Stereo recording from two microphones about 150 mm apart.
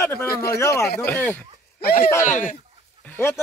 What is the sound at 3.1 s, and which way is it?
Speech, 15° left (ahead or behind).